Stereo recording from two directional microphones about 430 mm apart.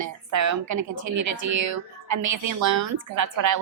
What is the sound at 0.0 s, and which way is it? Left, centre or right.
Speech, right.